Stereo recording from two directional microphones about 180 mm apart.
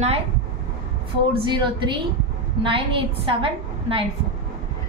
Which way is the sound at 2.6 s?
30° right (ahead or behind).